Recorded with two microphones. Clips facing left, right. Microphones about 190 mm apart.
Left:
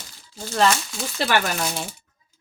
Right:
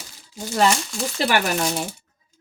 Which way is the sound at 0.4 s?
15° right (ahead or behind).